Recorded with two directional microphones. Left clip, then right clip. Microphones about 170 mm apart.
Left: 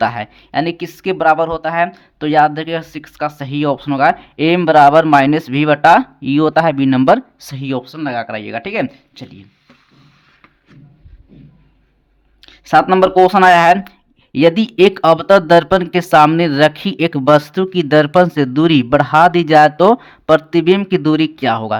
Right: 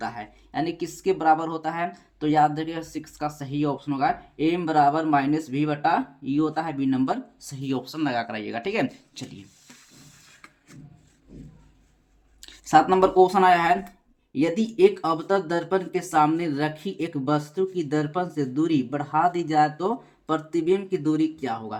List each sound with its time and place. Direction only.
0.0 s speech: 50° left (ahead or behind)
7.6 s speech: 30° left (ahead or behind)
12.6 s speech: 35° left (ahead or behind); by 21.8 s 60° left (ahead or behind)